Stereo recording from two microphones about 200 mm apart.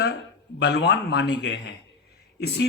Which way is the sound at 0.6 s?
60° left (ahead or behind).